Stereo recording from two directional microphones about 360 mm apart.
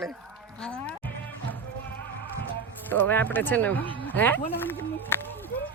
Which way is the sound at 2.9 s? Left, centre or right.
Centre.